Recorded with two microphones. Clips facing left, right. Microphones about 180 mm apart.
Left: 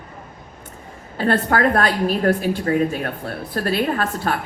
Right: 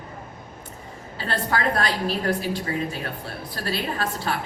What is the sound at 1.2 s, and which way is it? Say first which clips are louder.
A woman's voice: left 8 dB; 50° left (ahead or behind).